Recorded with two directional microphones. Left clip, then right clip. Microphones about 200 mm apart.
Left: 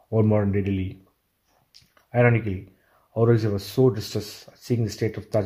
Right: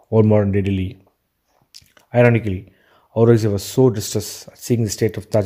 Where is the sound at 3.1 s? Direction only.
40° right (ahead or behind).